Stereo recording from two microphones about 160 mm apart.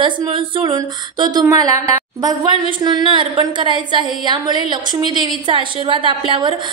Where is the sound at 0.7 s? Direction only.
25° right (ahead or behind).